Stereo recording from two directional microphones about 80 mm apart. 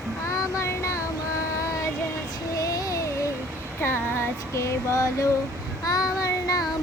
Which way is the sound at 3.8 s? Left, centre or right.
Left.